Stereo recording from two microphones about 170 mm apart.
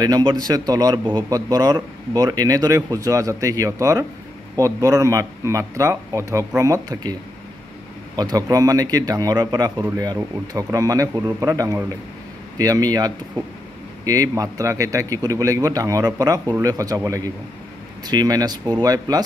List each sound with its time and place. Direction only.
0.0 s a man's voice: 25° right (ahead or behind)
8.2 s a man's voice: 20° right (ahead or behind)